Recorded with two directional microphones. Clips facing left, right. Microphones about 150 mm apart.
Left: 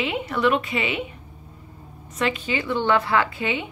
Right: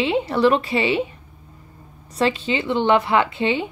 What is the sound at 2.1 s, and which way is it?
A woman's voice, 30° right (ahead or behind).